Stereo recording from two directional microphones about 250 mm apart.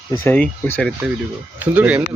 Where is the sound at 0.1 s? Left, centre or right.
Centre.